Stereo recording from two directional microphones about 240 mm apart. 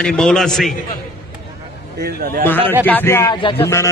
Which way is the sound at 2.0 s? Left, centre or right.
Right.